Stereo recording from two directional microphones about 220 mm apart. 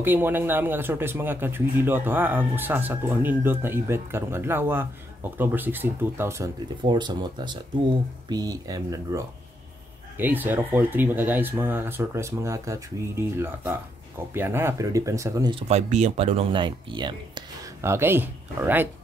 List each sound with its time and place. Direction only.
0.0 s speech: 10° right (ahead or behind)
15.7 s speech: 30° right (ahead or behind)
17.8 s speech: 10° right (ahead or behind)